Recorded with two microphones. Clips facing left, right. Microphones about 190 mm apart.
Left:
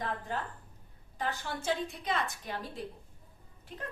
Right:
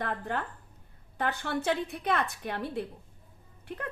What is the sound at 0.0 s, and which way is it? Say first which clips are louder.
Speech: right 3 dB; 60° right (ahead or behind).